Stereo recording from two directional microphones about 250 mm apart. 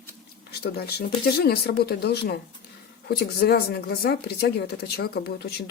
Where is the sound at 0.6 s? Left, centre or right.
Left.